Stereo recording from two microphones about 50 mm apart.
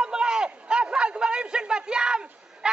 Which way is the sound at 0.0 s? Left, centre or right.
Centre.